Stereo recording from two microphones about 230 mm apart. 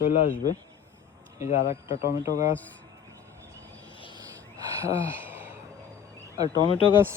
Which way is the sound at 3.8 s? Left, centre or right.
Left.